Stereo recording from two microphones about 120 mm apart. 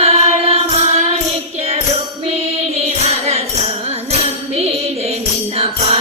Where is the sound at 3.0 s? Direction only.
60° right (ahead or behind).